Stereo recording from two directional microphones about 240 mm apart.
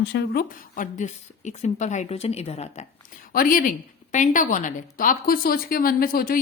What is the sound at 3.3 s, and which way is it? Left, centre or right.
A woman's voice, left.